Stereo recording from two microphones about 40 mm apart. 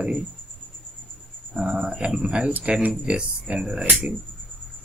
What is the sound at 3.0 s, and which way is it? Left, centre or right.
Speech, right.